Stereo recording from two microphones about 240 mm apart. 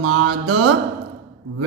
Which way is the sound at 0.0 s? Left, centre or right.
Right.